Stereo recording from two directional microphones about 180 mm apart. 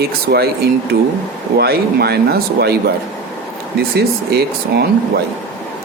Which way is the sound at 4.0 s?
60° right (ahead or behind).